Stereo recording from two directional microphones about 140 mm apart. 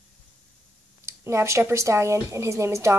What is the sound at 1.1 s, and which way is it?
Speech, 20° right (ahead or behind).